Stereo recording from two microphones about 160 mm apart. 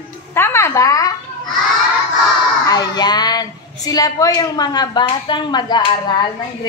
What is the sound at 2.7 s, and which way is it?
A woman's voice, 25° left (ahead or behind).